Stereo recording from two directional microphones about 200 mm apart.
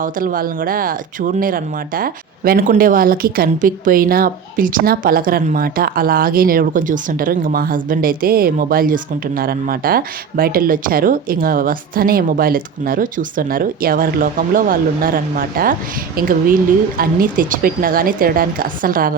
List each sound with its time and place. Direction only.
0.0 s speech: 45° right (ahead or behind)